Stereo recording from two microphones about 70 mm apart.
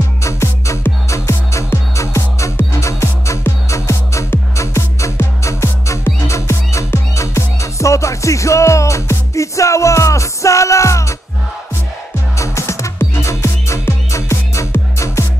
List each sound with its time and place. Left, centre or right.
0.2 s music: left
12.4 s music: left